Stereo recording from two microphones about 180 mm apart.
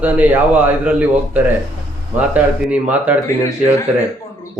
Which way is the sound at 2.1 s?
10° right (ahead or behind).